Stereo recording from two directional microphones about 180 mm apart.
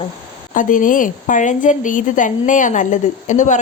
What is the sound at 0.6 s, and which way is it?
A woman's voice, 45° left (ahead or behind).